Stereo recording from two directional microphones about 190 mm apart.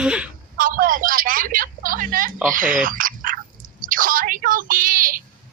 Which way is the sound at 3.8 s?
45° right (ahead or behind).